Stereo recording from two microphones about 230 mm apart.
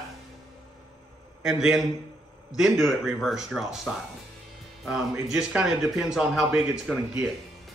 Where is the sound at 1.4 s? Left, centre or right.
Centre.